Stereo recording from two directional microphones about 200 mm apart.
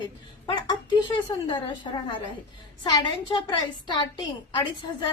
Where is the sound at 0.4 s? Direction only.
20° left (ahead or behind).